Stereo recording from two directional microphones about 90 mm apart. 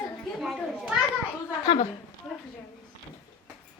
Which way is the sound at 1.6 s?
90° left.